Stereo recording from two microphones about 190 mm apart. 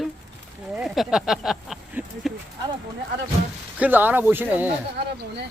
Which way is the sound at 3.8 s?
10° right (ahead or behind).